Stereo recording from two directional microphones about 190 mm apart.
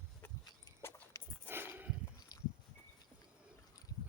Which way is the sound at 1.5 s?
10° right (ahead or behind).